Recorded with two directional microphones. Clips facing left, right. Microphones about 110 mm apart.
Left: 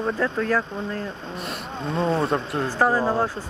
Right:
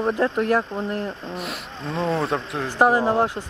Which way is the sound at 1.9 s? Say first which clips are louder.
Left 1 dB; centre (ahead or behind).